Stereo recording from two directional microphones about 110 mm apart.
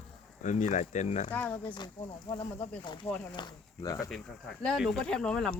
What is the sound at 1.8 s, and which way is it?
Speech, 40° left (ahead or behind).